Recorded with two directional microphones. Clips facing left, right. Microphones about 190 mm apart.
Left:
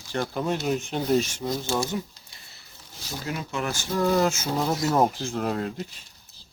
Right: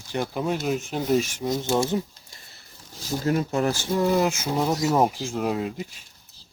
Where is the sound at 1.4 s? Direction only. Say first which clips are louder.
Right 3 dB; 20° right (ahead or behind).